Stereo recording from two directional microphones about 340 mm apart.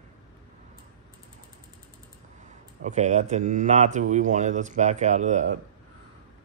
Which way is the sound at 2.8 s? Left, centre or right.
Right.